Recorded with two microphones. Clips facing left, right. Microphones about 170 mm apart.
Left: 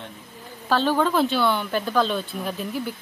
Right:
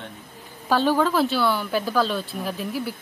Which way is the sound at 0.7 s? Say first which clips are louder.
Right 1 dB; 10° right (ahead or behind).